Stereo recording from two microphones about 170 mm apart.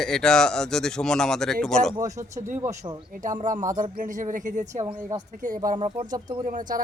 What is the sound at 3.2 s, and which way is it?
Speech, 50° right (ahead or behind).